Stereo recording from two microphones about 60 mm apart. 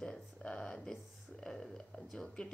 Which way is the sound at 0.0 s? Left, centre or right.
Centre.